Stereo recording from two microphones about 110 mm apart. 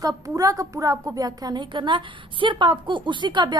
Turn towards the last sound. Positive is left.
turn(degrees=-45)  # may be behind; listen again after turning